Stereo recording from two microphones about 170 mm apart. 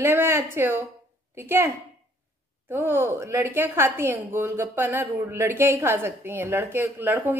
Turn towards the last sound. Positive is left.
turn(degrees=-10)  # may be behind; listen again after turning